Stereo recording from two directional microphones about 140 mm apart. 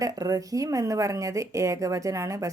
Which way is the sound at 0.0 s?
25° right (ahead or behind).